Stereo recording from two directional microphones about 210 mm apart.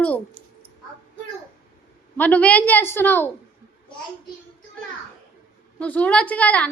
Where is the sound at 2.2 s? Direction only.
5° left (ahead or behind).